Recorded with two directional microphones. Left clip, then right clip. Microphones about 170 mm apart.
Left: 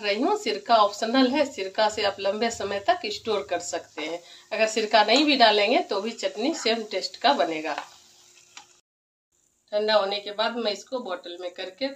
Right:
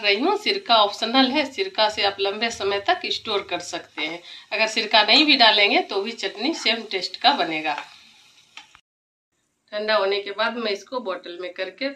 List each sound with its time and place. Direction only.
0.0 s speech: 60° left (ahead or behind)
9.7 s a woman's voice: 50° left (ahead or behind)